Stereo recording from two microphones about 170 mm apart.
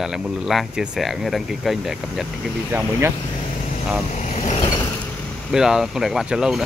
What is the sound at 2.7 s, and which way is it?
Speech, 15° right (ahead or behind).